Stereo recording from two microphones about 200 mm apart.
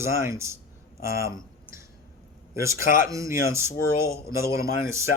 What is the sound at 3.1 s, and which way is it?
Speech, 15° right (ahead or behind).